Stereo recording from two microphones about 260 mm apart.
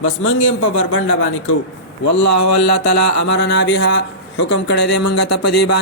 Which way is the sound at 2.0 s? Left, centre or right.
Left.